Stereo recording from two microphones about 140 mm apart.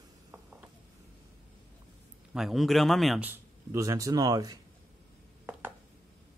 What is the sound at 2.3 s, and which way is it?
Speech, centre (ahead or behind).